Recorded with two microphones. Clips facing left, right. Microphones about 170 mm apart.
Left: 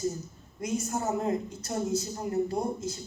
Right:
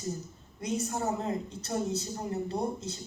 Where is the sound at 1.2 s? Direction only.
30° right (ahead or behind).